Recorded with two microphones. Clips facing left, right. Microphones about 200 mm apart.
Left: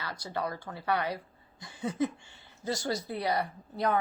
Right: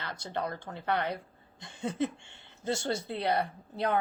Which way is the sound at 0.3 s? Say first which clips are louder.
Even; 25° right (ahead or behind).